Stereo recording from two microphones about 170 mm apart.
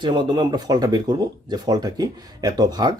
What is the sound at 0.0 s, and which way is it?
A man's voice, 25° right (ahead or behind).